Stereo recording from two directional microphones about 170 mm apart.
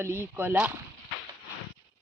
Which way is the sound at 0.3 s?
10° right (ahead or behind).